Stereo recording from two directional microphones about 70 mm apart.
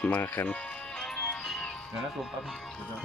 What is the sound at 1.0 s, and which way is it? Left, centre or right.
Music, centre.